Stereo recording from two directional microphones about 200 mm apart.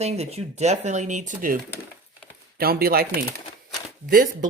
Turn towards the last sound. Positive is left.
turn(degrees=-45)  # may be behind; listen again after turning